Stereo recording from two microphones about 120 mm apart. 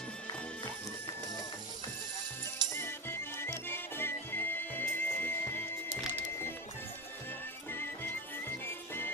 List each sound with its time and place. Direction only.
2.7 s music: 20° left (ahead or behind)
7.7 s music: 20° left (ahead or behind)